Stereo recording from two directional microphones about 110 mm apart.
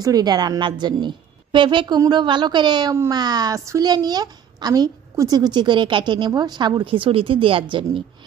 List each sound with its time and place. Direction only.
0.0 s a woman's voice: 35° right (ahead or behind); by 7.6 s 55° right (ahead or behind)